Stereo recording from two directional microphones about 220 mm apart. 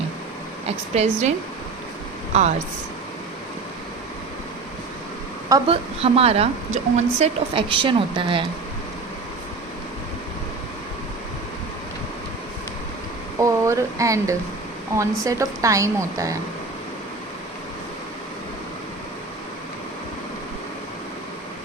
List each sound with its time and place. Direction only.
1.0 s a woman's voice: 25° right (ahead or behind)
2.3 s speech: 30° right (ahead or behind)
5.5 s a woman's voice: 25° right (ahead or behind)
13.4 s a woman's voice: 15° right (ahead or behind)